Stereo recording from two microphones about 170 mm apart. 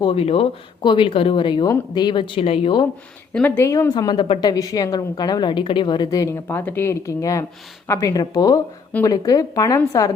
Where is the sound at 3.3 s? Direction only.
10° left (ahead or behind).